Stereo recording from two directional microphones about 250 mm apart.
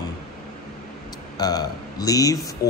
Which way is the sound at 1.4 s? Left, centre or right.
Centre.